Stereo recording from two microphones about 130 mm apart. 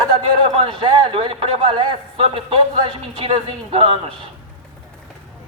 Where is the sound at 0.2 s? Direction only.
45° right (ahead or behind).